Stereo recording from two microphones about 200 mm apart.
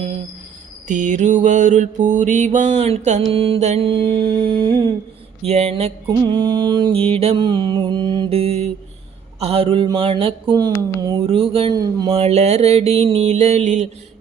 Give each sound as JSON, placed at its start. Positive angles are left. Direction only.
{"t": 0.9, "sound": "mantra", "side_deg": -40}